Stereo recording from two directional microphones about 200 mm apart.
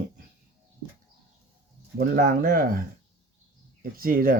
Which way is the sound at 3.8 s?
45° right (ahead or behind).